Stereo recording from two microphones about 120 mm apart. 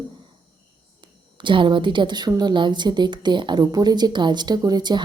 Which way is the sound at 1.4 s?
40° right (ahead or behind).